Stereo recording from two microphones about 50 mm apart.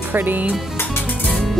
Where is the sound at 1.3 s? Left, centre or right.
Centre.